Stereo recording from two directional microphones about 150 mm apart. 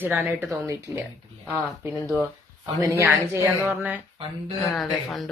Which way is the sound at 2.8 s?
20° right (ahead or behind).